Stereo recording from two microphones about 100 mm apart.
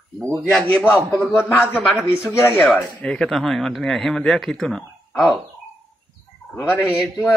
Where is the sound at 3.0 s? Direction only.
5° left (ahead or behind).